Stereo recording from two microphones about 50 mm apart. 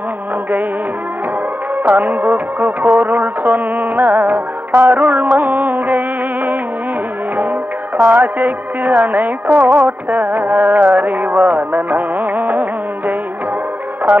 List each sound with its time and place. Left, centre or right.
1.8 s music: right
8.0 s music: right